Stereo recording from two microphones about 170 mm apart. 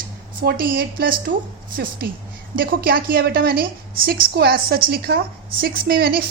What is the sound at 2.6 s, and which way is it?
A woman's voice, 60° right (ahead or behind).